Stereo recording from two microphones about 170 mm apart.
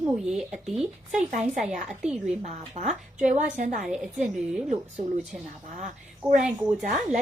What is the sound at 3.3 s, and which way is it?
Speech, 55° right (ahead or behind).